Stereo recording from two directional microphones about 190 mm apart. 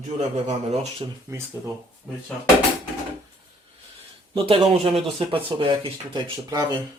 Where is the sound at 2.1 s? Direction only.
5° right (ahead or behind).